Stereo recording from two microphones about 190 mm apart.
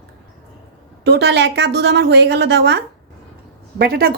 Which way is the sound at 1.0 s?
60° right (ahead or behind).